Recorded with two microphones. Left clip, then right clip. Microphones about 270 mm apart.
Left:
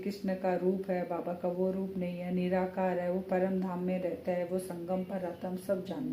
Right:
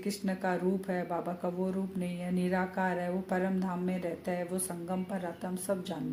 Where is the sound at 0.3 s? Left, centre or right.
Right.